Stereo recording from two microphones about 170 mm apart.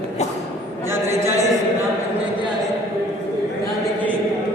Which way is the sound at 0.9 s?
15° right (ahead or behind).